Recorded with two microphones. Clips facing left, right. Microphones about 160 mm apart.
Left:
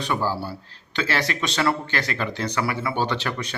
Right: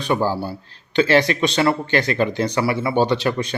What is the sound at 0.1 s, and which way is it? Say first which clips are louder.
Speech: right 6 dB; 20° right (ahead or behind).